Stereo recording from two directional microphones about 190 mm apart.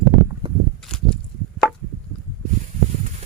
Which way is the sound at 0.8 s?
5° left (ahead or behind).